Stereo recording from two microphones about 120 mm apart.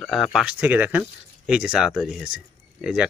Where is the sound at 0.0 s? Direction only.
Centre (ahead or behind).